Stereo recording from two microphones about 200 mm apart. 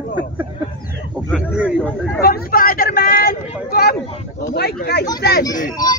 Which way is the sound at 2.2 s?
45° left (ahead or behind).